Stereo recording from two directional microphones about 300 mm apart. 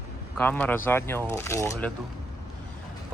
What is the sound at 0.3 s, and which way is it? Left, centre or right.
Speech, centre.